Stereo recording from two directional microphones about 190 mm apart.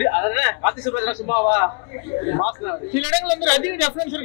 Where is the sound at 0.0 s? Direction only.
20° left (ahead or behind).